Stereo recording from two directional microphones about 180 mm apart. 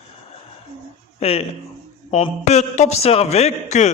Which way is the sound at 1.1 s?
35° left (ahead or behind).